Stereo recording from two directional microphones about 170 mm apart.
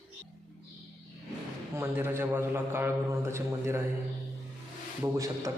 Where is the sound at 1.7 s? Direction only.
10° right (ahead or behind).